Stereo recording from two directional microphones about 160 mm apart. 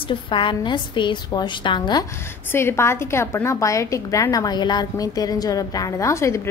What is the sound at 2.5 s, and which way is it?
A woman's voice, 15° left (ahead or behind).